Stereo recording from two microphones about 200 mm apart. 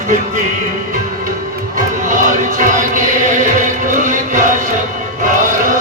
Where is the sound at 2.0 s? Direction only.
40° right (ahead or behind).